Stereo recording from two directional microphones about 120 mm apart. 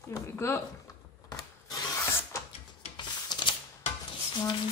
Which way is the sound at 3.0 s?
40° left (ahead or behind).